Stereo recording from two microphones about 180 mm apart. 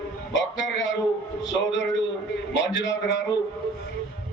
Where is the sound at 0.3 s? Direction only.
90° left.